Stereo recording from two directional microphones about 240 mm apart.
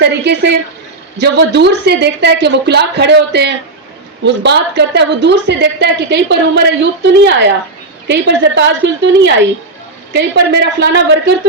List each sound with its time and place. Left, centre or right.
0.0 s a woman's voice: right